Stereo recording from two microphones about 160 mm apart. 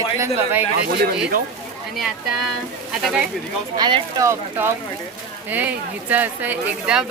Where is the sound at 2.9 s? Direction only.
Centre (ahead or behind).